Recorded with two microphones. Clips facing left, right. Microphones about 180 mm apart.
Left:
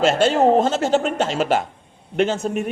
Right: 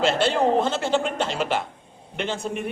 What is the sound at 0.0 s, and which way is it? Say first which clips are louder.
A man's voice: left 5 dB; 45° left (ahead or behind).